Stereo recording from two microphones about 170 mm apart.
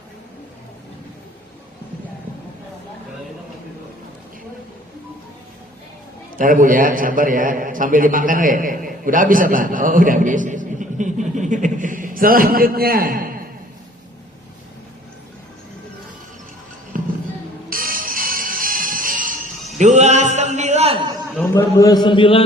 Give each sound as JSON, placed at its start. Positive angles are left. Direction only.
{"t": 6.3, "sound": "a man's voice", "side_deg": -55}
{"t": 16.9, "sound": "music", "side_deg": -55}
{"t": 19.8, "sound": "a sound", "side_deg": -45}
{"t": 21.5, "sound": "a man's voice", "side_deg": 20}